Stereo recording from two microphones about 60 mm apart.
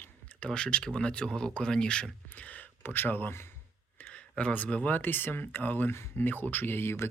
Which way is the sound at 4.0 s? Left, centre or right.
Left.